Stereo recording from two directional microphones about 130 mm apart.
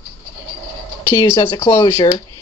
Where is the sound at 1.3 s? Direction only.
40° left (ahead or behind).